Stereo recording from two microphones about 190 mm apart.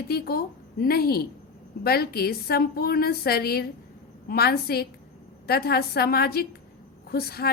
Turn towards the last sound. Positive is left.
turn(degrees=55)  # may be behind; listen again after turning